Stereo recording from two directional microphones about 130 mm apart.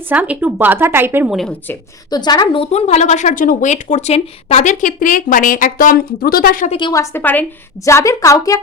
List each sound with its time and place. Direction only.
0.1 s speech: 15° right (ahead or behind)
1.3 s a woman's voice: centre (ahead or behind)
2.0 s a woman's voice: 30° left (ahead or behind)
2.6 s speech: 55° left (ahead or behind)
4.7 s a woman's voice: 85° left
6.7 s a woman's voice: 35° left (ahead or behind)
6.9 s a woman's voice: 20° left (ahead or behind)